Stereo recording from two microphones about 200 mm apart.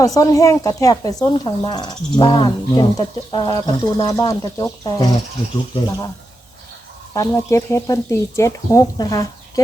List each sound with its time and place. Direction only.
0.0 s speech: 15° left (ahead or behind)
7.1 s speech: 15° left (ahead or behind)